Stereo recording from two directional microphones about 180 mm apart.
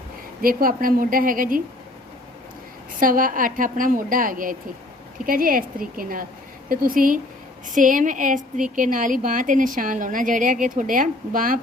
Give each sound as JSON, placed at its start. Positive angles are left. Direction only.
{"t": 0.4, "sound": "a woman's voice", "side_deg": -50}
{"t": 3.0, "sound": "a woman's voice", "side_deg": -50}